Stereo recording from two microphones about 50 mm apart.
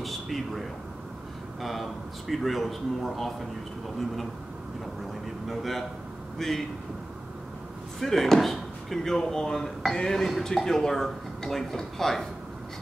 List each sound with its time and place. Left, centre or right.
0.0 s a sound: centre
1.6 s speech: centre
5.5 s a man's voice: centre
8.0 s speech: centre